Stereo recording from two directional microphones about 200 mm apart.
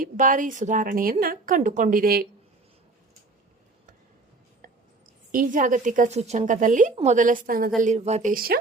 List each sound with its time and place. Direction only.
0.0 s a woman's voice: 40° right (ahead or behind)
5.3 s a woman's voice: 45° right (ahead or behind)